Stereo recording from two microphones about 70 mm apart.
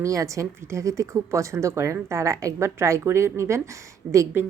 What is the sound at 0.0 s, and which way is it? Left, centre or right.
Speech, right.